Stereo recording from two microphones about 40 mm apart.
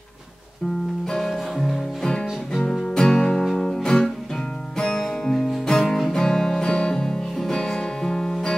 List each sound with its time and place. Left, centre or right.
1.1 s music: centre
2.0 s music: centre
5.9 s music: centre